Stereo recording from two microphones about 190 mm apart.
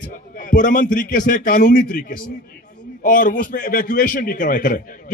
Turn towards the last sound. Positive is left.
turn(degrees=45)  # may be behind; listen again after turning